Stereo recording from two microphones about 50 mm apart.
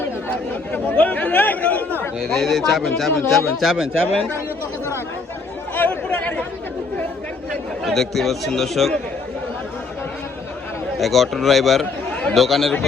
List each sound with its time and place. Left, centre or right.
0.9 s speech: left
2.3 s speech: centre
5.7 s speech: left
7.9 s speech: centre
10.9 s speech: centre